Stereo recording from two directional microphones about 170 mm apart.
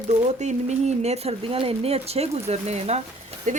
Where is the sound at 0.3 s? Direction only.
40° right (ahead or behind).